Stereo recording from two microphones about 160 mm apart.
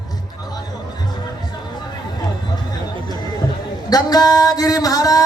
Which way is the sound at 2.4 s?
25° left (ahead or behind).